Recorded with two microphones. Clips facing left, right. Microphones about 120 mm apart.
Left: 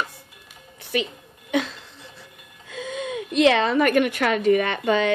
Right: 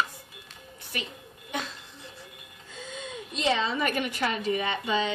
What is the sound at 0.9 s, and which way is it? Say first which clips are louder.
Speech: left 12 dB; 90° left.